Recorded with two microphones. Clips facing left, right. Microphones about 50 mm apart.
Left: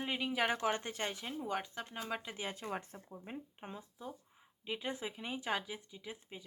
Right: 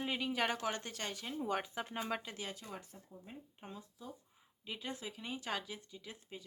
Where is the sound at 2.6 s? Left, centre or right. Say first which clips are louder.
Left 7 dB; left.